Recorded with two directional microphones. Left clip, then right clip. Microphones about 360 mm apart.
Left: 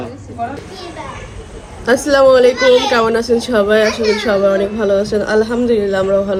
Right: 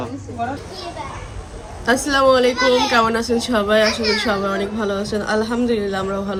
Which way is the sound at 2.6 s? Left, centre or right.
Left.